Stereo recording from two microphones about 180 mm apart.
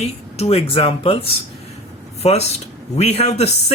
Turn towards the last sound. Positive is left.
turn(degrees=35)  # may be behind; listen again after turning